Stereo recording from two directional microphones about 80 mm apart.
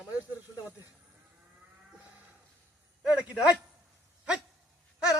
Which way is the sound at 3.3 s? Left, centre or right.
Centre.